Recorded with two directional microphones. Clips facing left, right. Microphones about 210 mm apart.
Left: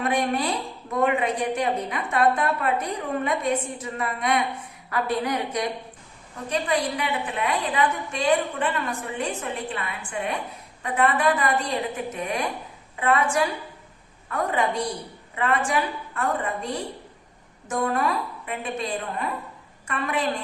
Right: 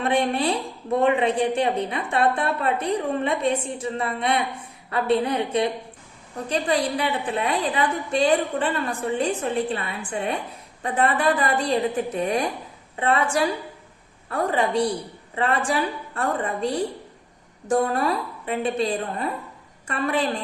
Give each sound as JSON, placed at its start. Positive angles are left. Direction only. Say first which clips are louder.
{"t": 0.0, "sound": "a woman's voice", "louder": "right 2 dB", "side_deg": -30}
{"t": 17.7, "sound": "a woman's voice", "louder": "right 3 dB", "side_deg": -35}